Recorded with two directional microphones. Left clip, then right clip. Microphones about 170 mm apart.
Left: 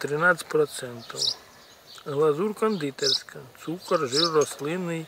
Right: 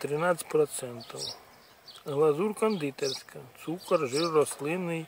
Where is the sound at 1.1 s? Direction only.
15° left (ahead or behind).